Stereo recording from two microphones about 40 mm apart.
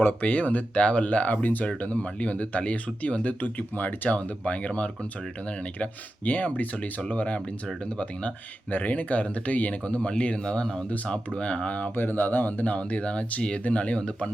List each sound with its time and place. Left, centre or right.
0.1 s speech: left
8.7 s speech: left
11.9 s speech: left